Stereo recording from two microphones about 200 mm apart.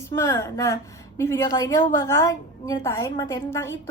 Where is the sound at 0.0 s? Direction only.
15° left (ahead or behind).